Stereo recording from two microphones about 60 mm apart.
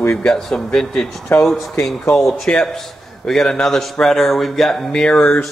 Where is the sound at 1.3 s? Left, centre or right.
Left.